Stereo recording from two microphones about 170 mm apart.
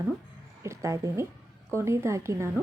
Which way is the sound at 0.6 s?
15° right (ahead or behind).